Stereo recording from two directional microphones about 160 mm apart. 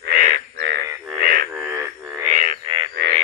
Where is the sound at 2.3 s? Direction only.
55° right (ahead or behind).